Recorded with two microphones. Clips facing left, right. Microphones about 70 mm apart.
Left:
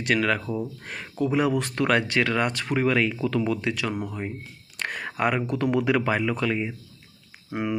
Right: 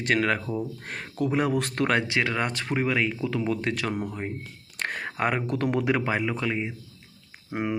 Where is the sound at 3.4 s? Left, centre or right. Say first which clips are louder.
Left 1 dB; right.